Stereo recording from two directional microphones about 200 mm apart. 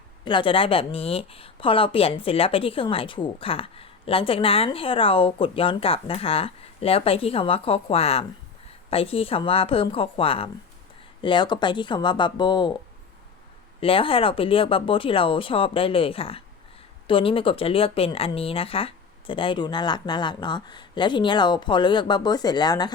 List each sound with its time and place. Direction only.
0.3 s a woman's voice: 25° left (ahead or behind)
13.8 s a woman's voice: 25° left (ahead or behind)